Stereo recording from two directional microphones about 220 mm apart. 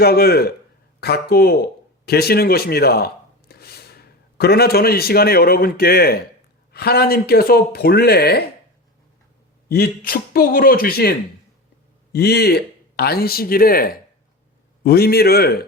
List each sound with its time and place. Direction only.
0.0 s speech: 45° left (ahead or behind)
3.5 s a sound: 45° left (ahead or behind)
4.4 s speech: 45° left (ahead or behind)
9.6 s speech: 45° left (ahead or behind)